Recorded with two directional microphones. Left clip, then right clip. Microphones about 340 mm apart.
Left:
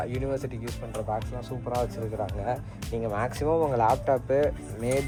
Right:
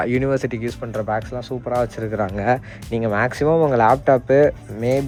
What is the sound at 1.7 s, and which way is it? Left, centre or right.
Speech, right.